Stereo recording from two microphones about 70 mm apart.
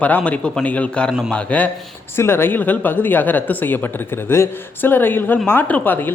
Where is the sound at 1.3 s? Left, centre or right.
Centre.